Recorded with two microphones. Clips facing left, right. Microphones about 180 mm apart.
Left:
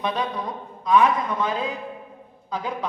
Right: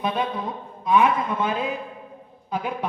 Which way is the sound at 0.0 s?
25° right (ahead or behind).